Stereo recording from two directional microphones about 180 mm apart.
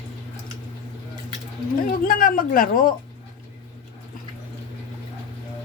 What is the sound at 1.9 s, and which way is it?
A woman's voice, 50° left (ahead or behind).